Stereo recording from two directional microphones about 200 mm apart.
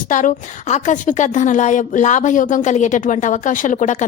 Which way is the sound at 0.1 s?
40° left (ahead or behind).